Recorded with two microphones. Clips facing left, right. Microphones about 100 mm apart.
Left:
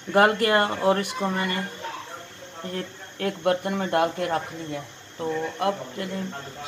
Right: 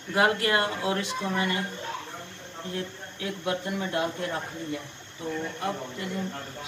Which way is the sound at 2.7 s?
60° left (ahead or behind).